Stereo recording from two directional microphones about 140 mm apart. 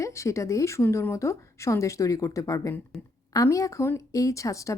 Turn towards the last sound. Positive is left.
turn(degrees=20)  # may be behind; listen again after turning